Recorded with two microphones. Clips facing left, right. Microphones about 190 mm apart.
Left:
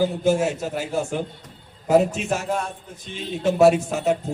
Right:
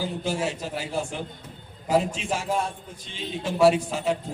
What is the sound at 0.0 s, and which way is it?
A man's voice, 45° left (ahead or behind).